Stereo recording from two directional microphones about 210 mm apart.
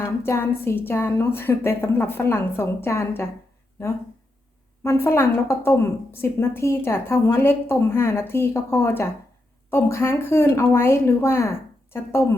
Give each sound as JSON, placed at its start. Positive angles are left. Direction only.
{"t": 0.0, "sound": "a woman's voice", "side_deg": 10}
{"t": 4.8, "sound": "a woman's voice", "side_deg": 10}